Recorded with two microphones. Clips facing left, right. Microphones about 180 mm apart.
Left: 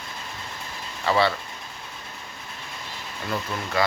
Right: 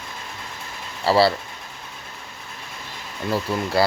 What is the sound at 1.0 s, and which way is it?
Speech, 35° right (ahead or behind).